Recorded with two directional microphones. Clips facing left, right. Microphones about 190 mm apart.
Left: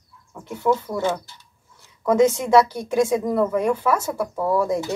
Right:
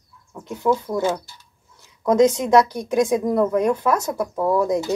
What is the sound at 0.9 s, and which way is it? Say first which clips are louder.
Speech: right 2 dB; 5° right (ahead or behind).